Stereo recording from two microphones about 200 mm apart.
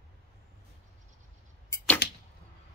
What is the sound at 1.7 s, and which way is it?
Arrow, 10° left (ahead or behind).